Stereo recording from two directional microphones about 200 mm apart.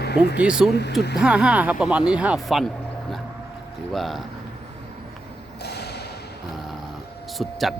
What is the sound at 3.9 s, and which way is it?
Speech, centre (ahead or behind).